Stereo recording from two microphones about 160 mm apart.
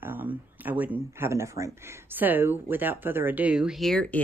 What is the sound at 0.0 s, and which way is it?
Speech, 10° right (ahead or behind).